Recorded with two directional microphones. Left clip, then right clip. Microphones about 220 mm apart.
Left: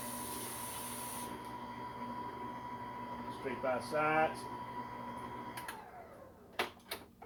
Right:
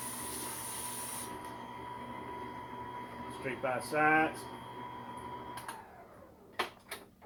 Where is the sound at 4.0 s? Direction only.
25° right (ahead or behind).